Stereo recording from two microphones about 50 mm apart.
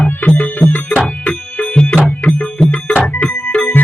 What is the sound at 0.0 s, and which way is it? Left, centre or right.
Music, left.